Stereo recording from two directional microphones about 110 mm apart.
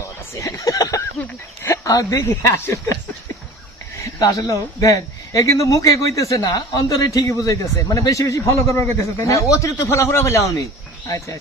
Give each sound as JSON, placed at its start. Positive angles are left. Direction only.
{"t": 0.3, "sound": "speech", "side_deg": 30}
{"t": 3.9, "sound": "speech", "side_deg": 30}